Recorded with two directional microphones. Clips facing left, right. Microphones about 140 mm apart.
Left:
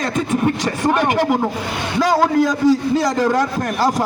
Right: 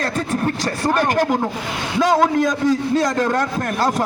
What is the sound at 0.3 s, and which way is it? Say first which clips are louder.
Speech: left 3 dB; 15° left (ahead or behind).